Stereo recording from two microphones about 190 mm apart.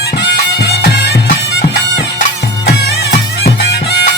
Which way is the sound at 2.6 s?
60° left (ahead or behind).